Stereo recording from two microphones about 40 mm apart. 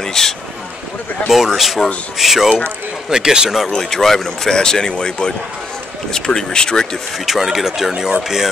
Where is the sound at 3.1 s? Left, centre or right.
Centre.